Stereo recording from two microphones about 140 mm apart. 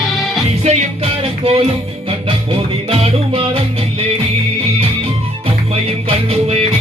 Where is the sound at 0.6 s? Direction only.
45° right (ahead or behind).